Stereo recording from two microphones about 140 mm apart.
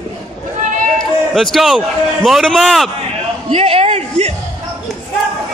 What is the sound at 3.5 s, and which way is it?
Speech, 45° right (ahead or behind).